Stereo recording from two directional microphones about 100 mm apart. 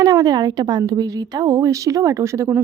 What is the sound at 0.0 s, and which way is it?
A woman's voice, 35° right (ahead or behind).